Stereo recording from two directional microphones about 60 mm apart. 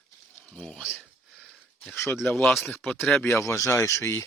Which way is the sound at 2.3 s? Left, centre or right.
Centre.